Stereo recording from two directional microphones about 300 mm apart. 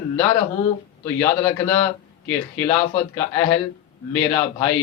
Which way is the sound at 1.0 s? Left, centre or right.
Centre.